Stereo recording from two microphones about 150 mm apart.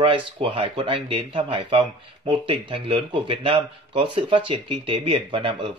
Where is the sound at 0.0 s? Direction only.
35° right (ahead or behind).